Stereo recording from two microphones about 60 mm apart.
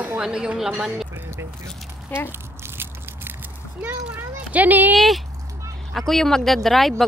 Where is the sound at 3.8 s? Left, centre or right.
Right.